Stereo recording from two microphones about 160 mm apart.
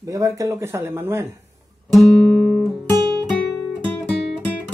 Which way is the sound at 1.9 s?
5° left (ahead or behind).